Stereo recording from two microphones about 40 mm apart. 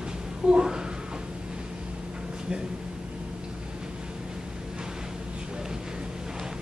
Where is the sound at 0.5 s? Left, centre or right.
Right.